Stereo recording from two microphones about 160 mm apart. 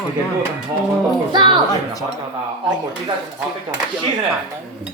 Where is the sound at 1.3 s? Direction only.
30° right (ahead or behind).